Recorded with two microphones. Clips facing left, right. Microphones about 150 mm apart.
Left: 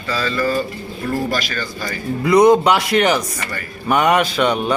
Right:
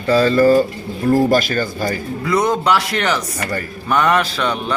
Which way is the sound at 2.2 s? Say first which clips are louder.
Left 7 dB; 15° left (ahead or behind).